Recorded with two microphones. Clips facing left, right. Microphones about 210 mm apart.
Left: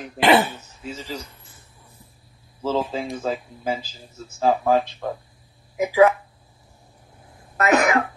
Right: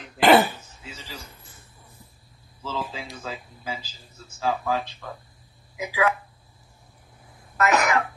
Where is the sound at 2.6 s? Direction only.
45° left (ahead or behind).